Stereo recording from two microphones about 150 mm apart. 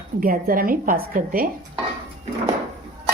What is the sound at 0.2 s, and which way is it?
A woman's voice, 70° right (ahead or behind).